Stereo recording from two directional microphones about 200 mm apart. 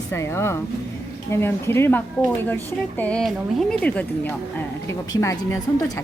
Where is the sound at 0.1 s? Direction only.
10° left (ahead or behind).